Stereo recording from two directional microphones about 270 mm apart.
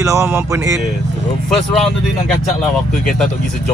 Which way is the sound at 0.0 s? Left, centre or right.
Centre.